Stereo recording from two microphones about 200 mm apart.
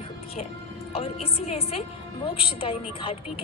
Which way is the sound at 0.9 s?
30° left (ahead or behind).